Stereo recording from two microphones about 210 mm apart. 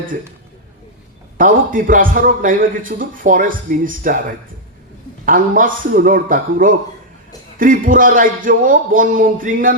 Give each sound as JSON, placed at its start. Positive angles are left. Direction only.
{"t": 1.4, "sound": "a man's voice", "side_deg": -40}
{"t": 5.2, "sound": "a man's voice", "side_deg": -40}